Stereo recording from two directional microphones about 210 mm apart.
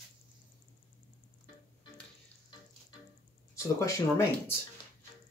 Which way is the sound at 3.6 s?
15° left (ahead or behind).